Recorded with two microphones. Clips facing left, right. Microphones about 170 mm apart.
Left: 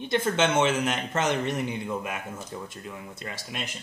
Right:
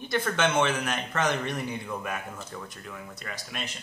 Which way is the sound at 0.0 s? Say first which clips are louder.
Left 2 dB; 25° left (ahead or behind).